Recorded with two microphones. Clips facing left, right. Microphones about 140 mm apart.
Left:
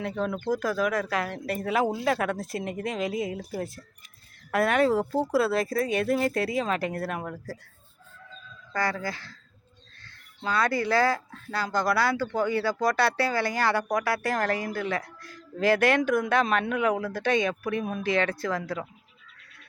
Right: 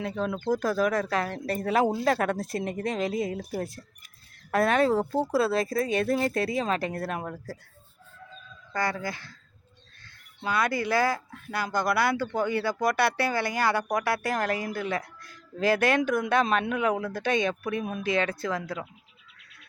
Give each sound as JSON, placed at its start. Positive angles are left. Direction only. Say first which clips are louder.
{"t": 0.3, "sound": "speech", "louder": "right 3 dB", "side_deg": -30}
{"t": 4.5, "sound": "speech", "louder": "even", "side_deg": -30}
{"t": 8.7, "sound": "speech", "louder": "left 1 dB", "side_deg": -20}